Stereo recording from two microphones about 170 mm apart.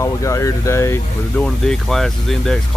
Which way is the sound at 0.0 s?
20° left (ahead or behind).